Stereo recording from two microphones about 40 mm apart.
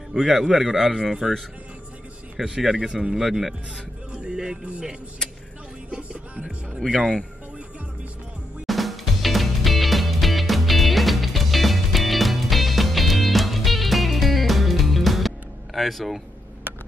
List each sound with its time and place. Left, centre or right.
0.1 s a man's voice: centre
2.3 s a man's voice: centre
3.2 s speech: centre
4.1 s music: centre
5.9 s speech: right
8.6 s music: centre